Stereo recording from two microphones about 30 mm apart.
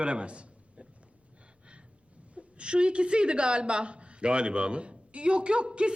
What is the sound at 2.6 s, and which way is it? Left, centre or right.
Speech, right.